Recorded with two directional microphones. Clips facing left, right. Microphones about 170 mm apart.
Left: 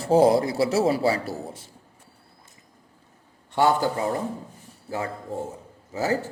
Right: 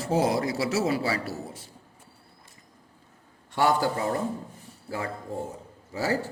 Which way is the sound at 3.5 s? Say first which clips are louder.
Left 3 dB; 20° left (ahead or behind).